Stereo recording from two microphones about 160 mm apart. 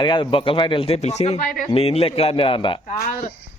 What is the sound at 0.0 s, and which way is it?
Speech, 30° left (ahead or behind).